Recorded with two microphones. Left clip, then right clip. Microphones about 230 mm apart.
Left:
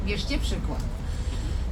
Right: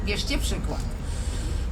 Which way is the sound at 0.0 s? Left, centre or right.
Right.